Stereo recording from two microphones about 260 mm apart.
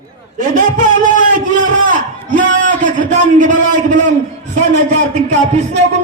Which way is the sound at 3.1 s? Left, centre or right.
Right.